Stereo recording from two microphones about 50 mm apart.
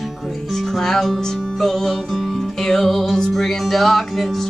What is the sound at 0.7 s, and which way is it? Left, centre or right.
Music, centre.